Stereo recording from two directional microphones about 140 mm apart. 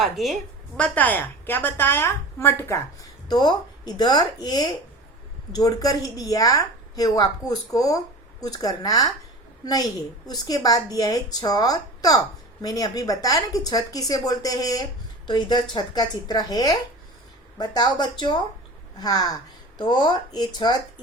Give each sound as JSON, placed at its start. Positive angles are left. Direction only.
{"t": 0.0, "sound": "a woman's voice", "side_deg": 0}
{"t": 0.8, "sound": "a woman's voice", "side_deg": 10}